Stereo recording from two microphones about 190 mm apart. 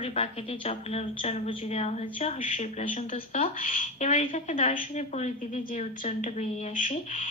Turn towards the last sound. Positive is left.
turn(degrees=40)  # may be behind; listen again after turning